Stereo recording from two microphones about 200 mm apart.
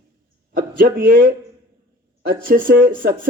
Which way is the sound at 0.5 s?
50° right (ahead or behind).